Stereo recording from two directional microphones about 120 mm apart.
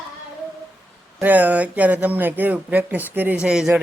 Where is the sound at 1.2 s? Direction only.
15° right (ahead or behind).